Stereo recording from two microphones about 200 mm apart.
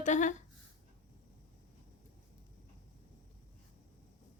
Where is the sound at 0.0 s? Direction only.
40° left (ahead or behind).